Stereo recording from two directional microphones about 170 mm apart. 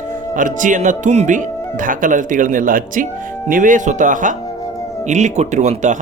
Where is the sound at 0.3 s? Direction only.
50° right (ahead or behind).